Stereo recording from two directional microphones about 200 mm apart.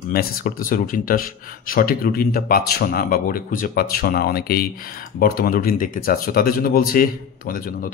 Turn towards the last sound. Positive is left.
turn(degrees=45)  # may be behind; listen again after turning